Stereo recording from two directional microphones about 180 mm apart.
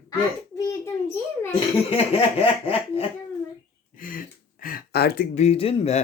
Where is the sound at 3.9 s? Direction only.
50° left (ahead or behind).